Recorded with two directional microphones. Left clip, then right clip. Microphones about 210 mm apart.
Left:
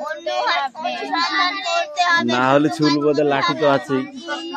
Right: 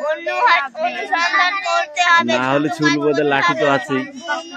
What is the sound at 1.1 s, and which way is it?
Child singing, 20° right (ahead or behind).